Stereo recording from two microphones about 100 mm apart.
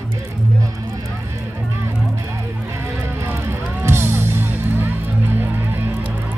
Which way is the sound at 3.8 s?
25° right (ahead or behind).